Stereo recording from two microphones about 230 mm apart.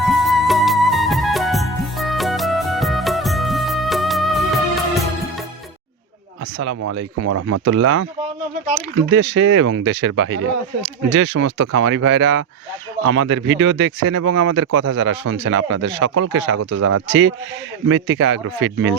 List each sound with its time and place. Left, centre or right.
0.0 s music: centre
7.3 s speech: right
7.6 s speech: right
9.1 s speech: right
16.7 s speech: right
17.1 s speech: right